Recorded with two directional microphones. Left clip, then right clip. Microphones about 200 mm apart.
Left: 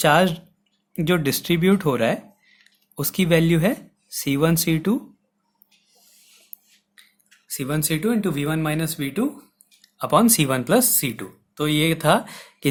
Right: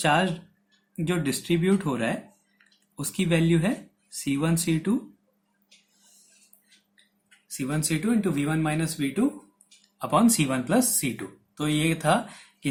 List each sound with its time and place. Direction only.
0.0 s speech: 55° left (ahead or behind)
7.4 s speech: 50° left (ahead or behind)